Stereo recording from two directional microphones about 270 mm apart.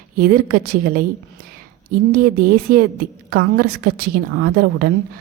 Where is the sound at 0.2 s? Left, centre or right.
Right.